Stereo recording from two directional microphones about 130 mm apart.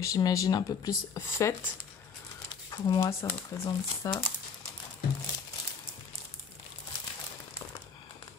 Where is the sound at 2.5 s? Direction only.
30° left (ahead or behind).